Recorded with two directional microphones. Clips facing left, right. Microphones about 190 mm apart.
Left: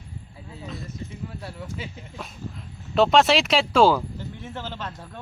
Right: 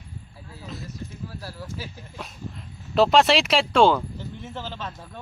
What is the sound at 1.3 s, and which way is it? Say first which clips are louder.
Speech: left 1 dB; centre (ahead or behind).